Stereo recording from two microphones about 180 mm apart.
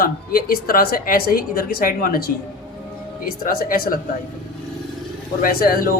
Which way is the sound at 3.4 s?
50° left (ahead or behind).